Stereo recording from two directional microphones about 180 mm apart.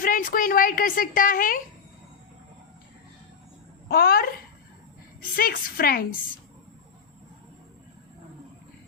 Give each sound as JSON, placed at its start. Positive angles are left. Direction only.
{"t": 0.0, "sound": "a woman's voice", "side_deg": 50}
{"t": 3.8, "sound": "a woman's voice", "side_deg": 60}
{"t": 5.4, "sound": "a woman's voice", "side_deg": 55}